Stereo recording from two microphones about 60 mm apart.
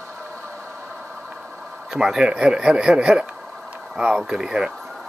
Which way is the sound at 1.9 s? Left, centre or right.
Centre.